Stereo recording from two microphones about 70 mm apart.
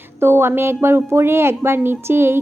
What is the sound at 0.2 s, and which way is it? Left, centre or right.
Speech, right.